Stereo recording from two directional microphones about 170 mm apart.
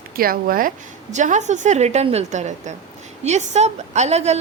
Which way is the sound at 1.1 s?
45° right (ahead or behind).